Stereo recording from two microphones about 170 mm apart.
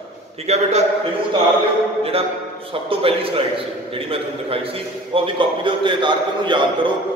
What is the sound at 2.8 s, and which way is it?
A man's voice, 35° right (ahead or behind).